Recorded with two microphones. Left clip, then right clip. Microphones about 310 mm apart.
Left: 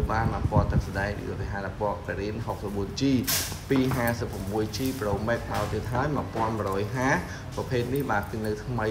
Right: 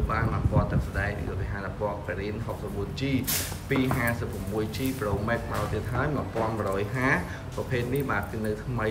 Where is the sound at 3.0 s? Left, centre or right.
Centre.